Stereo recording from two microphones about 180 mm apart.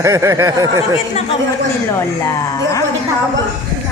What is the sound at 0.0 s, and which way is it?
Speech, 15° right (ahead or behind).